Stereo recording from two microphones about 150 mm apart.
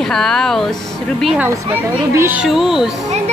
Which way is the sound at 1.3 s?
15° right (ahead or behind).